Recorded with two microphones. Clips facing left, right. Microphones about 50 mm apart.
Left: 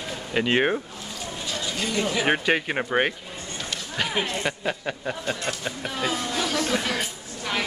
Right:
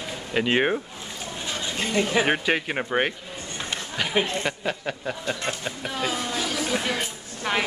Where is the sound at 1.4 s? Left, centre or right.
Right.